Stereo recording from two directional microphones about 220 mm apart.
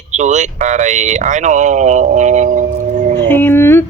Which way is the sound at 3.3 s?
10° left (ahead or behind).